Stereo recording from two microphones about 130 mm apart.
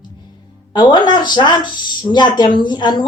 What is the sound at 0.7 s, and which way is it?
A woman's voice, 35° left (ahead or behind).